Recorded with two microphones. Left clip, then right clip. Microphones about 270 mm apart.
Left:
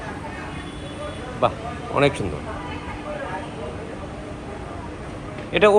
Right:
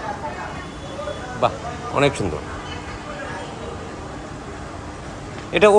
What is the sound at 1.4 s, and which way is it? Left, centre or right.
Speech, centre.